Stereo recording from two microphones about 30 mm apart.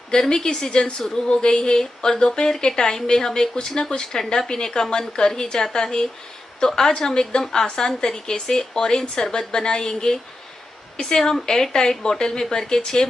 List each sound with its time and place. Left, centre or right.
0.3 s speech: left
4.1 s speech: centre